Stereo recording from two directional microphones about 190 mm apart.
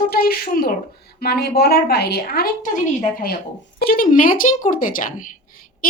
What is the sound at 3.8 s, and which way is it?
Speech, 50° left (ahead or behind).